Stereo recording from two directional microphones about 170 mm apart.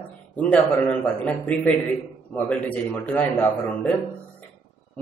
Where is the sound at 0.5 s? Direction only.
10° left (ahead or behind).